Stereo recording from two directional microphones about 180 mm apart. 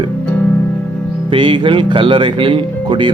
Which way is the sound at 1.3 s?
25° right (ahead or behind).